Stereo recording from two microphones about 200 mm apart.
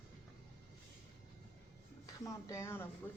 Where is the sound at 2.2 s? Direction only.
15° left (ahead or behind).